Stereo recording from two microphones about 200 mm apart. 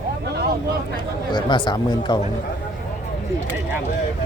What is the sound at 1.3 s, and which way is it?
Speech, 25° left (ahead or behind).